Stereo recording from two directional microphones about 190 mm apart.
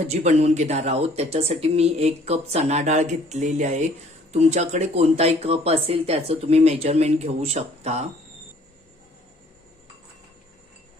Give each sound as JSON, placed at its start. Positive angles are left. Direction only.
{"t": 0.1, "sound": "speech", "side_deg": -35}